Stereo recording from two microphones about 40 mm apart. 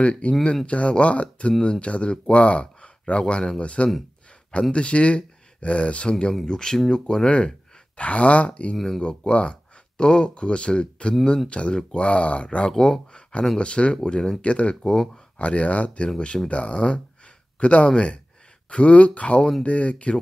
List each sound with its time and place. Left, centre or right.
0.0 s speech: left
8.0 s speech: left
8.7 s speech: centre
9.0 s speech: left
12.7 s speech: centre
13.6 s speech: left
14.8 s speech: centre
15.3 s speech: left